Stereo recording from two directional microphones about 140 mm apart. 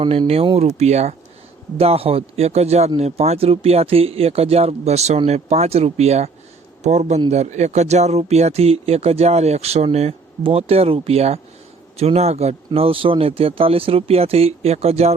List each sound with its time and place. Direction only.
0.0 s a man's voice: 40° right (ahead or behind)